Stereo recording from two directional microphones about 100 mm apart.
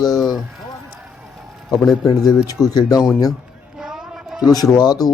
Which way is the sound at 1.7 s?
35° left (ahead or behind).